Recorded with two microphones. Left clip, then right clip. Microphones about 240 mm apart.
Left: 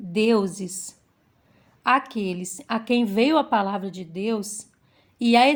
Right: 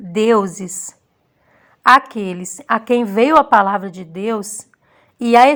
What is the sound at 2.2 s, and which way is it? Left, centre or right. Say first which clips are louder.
A woman's voice: right 9 dB; centre.